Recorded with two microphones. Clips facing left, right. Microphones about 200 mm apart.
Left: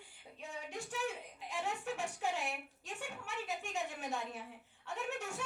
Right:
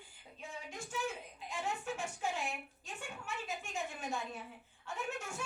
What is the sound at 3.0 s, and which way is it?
A woman's voice, 70° left (ahead or behind).